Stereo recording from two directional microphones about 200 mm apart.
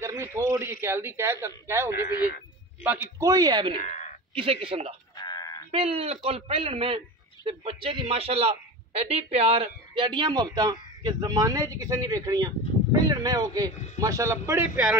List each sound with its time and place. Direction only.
0.0 s a man's voice: 15° right (ahead or behind)
3.8 s a woman's voice: 35° left (ahead or behind)
4.4 s a man's voice: 25° right (ahead or behind)
5.1 s a sound: 20° left (ahead or behind)
5.7 s a man's voice: 30° right (ahead or behind); by 15.0 s 10° right (ahead or behind)